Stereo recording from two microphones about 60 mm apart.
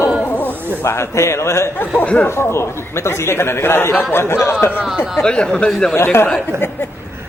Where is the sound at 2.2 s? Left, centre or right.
Left.